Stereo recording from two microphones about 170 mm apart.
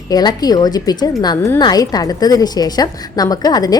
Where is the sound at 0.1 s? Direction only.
25° left (ahead or behind).